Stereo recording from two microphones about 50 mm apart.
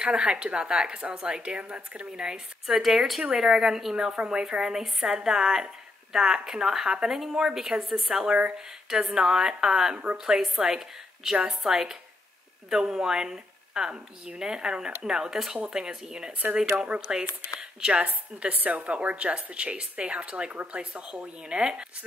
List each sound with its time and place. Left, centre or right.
0.0 s a woman's voice: centre
16.9 s a woman's voice: right
18.0 s a woman's voice: right